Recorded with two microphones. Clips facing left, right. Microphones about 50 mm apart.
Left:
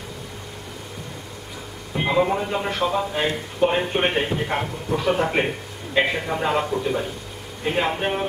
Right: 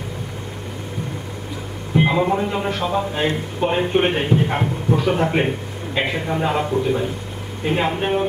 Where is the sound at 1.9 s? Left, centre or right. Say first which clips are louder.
Right 3 dB; centre.